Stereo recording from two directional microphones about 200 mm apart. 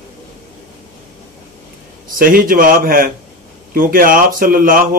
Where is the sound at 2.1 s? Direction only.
45° right (ahead or behind).